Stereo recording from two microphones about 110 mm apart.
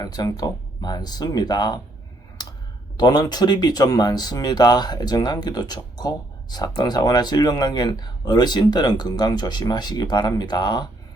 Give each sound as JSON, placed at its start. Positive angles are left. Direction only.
{"t": 0.0, "sound": "speech", "side_deg": 35}
{"t": 3.0, "sound": "speech", "side_deg": 40}